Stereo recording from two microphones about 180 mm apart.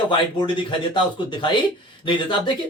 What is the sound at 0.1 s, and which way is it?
Speech, 25° left (ahead or behind).